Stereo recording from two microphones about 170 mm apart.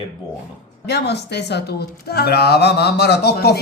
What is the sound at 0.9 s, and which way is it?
Speech, 75° left (ahead or behind).